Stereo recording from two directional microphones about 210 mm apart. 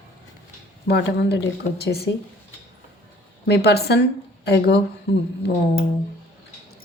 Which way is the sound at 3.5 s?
50° left (ahead or behind).